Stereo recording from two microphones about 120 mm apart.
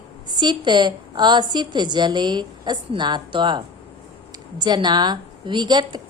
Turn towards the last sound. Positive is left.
turn(degrees=-40)  # may be behind; listen again after turning